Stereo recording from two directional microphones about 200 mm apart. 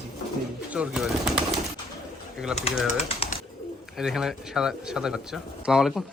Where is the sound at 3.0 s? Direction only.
30° left (ahead or behind).